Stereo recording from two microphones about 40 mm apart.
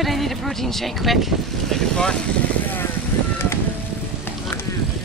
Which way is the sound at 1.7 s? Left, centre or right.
Centre.